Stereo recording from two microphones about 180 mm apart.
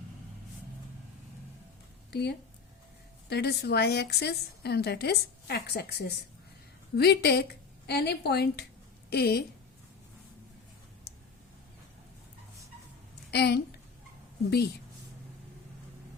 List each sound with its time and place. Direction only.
2.0 s a woman's voice: 65° left (ahead or behind)
13.3 s a woman's voice: 65° left (ahead or behind)